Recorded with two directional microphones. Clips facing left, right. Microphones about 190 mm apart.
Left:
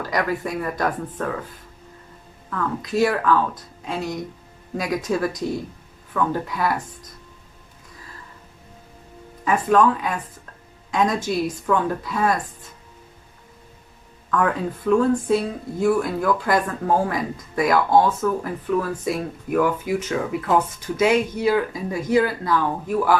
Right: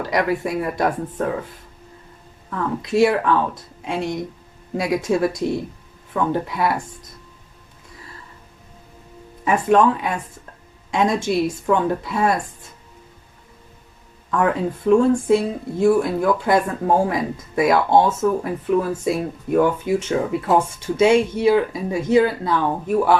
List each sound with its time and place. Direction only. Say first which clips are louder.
0.1 s speech: right 3 dB; 25° right (ahead or behind)
2.8 s speech: right 4 dB; 25° right (ahead or behind)
9.4 s speech: right 2 dB; 25° right (ahead or behind)
14.3 s speech: right 2 dB; 25° right (ahead or behind)